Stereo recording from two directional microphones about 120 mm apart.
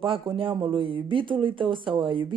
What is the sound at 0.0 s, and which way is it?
A woman's voice, 45° right (ahead or behind).